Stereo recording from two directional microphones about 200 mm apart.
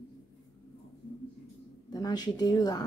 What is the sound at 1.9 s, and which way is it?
Speech, 20° left (ahead or behind).